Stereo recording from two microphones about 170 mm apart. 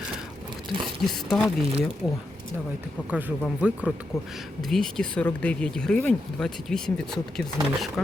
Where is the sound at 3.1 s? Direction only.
10° right (ahead or behind).